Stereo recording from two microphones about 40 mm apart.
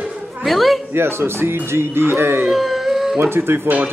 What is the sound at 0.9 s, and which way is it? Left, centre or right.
Speech, right.